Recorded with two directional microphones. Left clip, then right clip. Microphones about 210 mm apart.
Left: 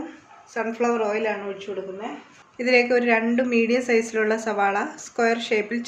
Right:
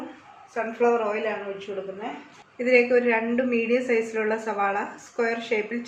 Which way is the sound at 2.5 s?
50° left (ahead or behind).